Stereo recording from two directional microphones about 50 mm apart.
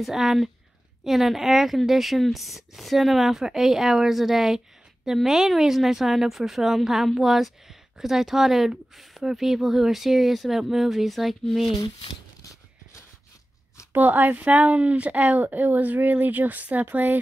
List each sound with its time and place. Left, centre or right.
0.0 s a woman's voice: centre
13.9 s a woman's voice: right